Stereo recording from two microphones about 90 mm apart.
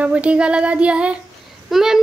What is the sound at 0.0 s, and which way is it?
A woman's voice, 15° right (ahead or behind).